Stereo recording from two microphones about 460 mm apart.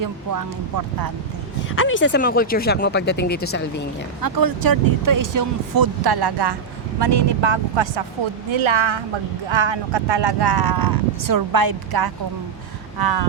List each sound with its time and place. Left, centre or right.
0.0 s speech: right
1.7 s speech: left
4.2 s speech: right
8.5 s a woman's voice: right